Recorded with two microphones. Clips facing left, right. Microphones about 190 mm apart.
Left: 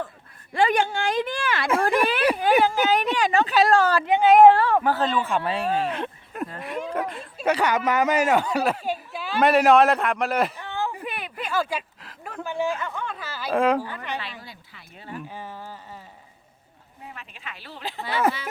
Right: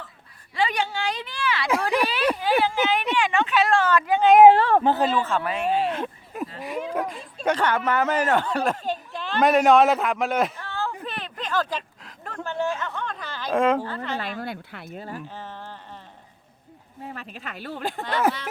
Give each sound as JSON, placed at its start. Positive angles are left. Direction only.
{"t": 0.5, "sound": "speech", "side_deg": 50}
{"t": 4.2, "sound": "speech", "side_deg": 0}
{"t": 4.6, "sound": "speech", "side_deg": -25}
{"t": 5.4, "sound": "speech", "side_deg": 30}
{"t": 5.8, "sound": "speech", "side_deg": 0}
{"t": 10.6, "sound": "a sound", "side_deg": 15}
{"t": 10.9, "sound": "speech", "side_deg": 10}
{"t": 13.8, "sound": "speech", "side_deg": 15}
{"t": 14.2, "sound": "speech", "side_deg": -50}
{"t": 14.8, "sound": "speech", "side_deg": -40}
{"t": 15.3, "sound": "speech", "side_deg": 10}
{"t": 17.1, "sound": "speech", "side_deg": -40}
{"t": 18.0, "sound": "speech", "side_deg": 0}